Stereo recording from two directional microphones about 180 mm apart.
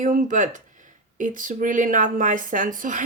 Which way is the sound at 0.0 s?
45° right (ahead or behind).